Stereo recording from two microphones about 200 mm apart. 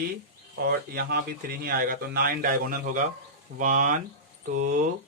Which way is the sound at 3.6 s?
40° right (ahead or behind).